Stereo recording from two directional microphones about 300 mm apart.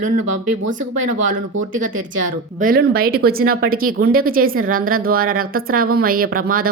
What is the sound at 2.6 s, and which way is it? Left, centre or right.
A woman's voice, right.